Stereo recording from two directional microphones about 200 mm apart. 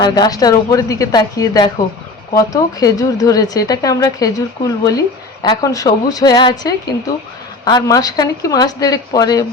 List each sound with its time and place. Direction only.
0.0 s speech: 20° left (ahead or behind)